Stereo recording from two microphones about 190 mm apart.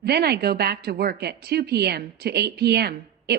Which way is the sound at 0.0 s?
60° right (ahead or behind).